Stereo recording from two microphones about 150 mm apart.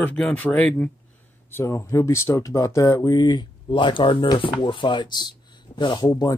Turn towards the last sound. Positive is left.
turn(degrees=25)  # may be behind; listen again after turning